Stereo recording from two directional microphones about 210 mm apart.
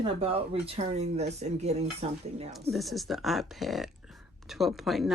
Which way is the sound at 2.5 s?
Centre (ahead or behind).